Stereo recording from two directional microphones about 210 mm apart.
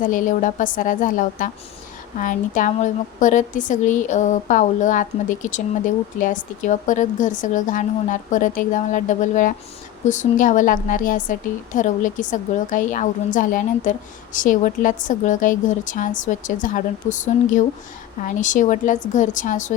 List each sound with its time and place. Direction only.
0.0 s a woman's voice: 40° left (ahead or behind)